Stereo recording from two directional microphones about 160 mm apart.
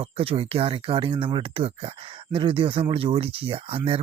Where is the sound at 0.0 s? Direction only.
35° right (ahead or behind).